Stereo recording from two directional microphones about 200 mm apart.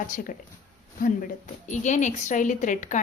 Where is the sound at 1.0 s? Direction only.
40° left (ahead or behind).